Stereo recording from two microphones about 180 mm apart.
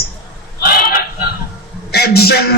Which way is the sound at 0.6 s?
55° left (ahead or behind).